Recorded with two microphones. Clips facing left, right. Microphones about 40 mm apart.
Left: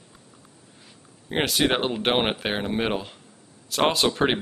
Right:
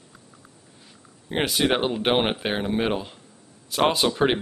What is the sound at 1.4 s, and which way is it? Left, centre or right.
Speech, centre.